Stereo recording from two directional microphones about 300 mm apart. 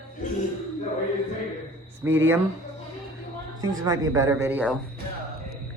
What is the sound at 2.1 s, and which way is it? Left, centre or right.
Speech, centre.